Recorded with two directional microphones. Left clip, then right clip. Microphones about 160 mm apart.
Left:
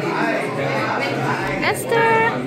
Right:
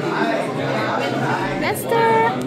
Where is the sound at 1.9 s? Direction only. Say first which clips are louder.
Even; 15° right (ahead or behind).